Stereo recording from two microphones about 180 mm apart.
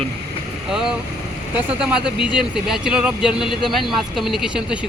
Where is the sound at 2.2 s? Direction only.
5° right (ahead or behind).